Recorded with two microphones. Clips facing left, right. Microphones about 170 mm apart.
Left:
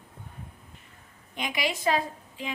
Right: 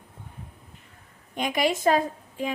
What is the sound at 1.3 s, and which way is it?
A woman's voice, 45° right (ahead or behind).